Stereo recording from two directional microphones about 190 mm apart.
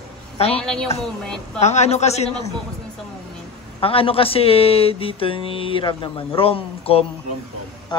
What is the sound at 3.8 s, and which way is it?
Speech, 30° left (ahead or behind).